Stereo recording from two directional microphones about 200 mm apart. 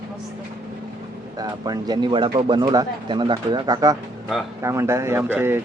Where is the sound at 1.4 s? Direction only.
20° right (ahead or behind).